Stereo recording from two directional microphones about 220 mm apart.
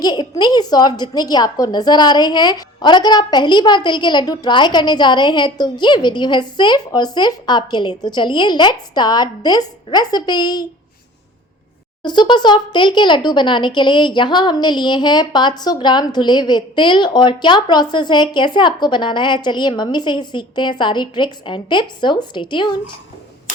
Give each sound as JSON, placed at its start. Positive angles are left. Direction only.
{"t": 0.0, "sound": "a woman's voice", "side_deg": 20}
{"t": 12.0, "sound": "a woman's voice", "side_deg": 20}